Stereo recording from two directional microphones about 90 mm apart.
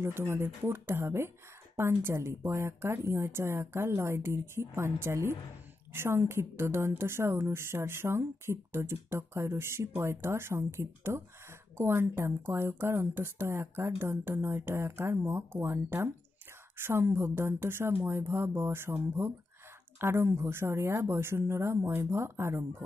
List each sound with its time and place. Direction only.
0.0 s a woman's voice: 30° right (ahead or behind)